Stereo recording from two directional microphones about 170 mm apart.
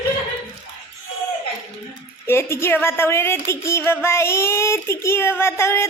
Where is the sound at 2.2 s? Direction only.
15° left (ahead or behind).